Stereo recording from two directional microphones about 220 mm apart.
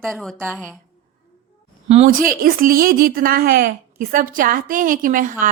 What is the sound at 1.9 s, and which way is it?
A woman's voice, 35° right (ahead or behind).